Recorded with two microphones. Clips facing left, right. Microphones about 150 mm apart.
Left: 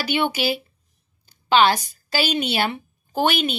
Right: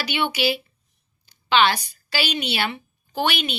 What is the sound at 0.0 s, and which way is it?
A woman's voice, 45° left (ahead or behind).